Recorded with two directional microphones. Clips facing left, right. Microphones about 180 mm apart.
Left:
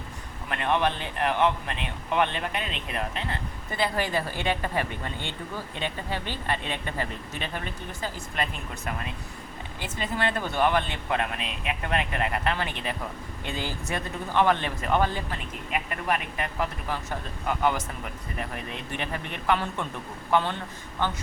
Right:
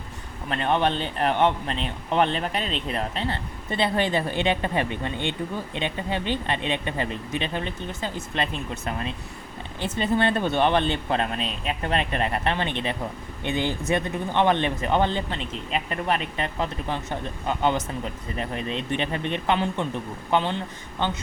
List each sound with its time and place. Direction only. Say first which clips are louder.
0.4 s a man's voice: right 2 dB; 30° right (ahead or behind)